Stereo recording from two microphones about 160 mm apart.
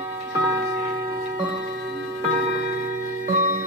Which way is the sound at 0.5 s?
20° right (ahead or behind).